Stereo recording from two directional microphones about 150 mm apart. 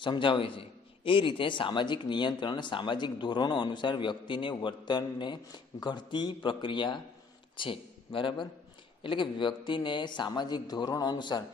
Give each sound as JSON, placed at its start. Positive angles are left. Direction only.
{"t": 0.0, "sound": "a man's voice", "side_deg": 35}